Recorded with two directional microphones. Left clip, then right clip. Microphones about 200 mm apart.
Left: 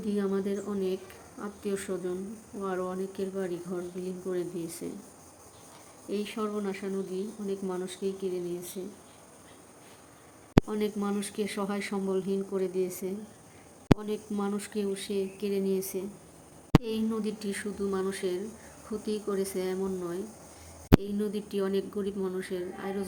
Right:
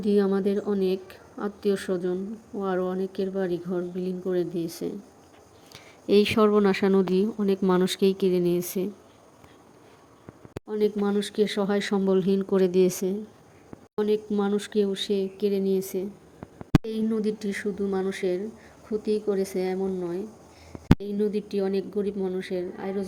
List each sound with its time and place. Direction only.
0.0 s speech: 35° right (ahead or behind)
6.1 s speech: 55° right (ahead or behind)
10.7 s a woman's voice: 20° right (ahead or behind)